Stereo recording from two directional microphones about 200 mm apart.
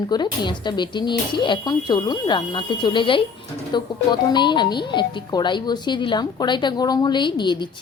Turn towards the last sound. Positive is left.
turn(degrees=20)  # may be behind; listen again after turning